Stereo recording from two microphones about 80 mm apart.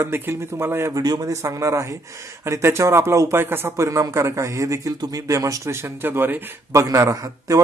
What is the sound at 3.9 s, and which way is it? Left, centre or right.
A man's voice, right.